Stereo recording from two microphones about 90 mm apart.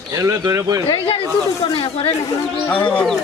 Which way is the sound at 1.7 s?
80° left.